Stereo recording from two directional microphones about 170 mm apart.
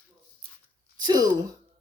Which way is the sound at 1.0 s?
25° right (ahead or behind).